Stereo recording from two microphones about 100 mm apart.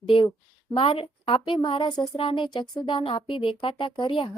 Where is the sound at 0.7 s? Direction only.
65° left (ahead or behind).